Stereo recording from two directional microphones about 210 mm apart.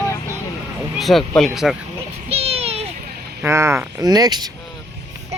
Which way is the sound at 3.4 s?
10° right (ahead or behind).